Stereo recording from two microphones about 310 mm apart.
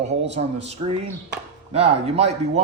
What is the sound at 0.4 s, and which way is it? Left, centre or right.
Speech, right.